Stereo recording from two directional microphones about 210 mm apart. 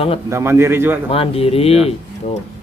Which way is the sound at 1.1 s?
25° left (ahead or behind).